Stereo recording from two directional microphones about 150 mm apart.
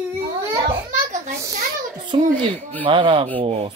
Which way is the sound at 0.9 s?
60° right (ahead or behind).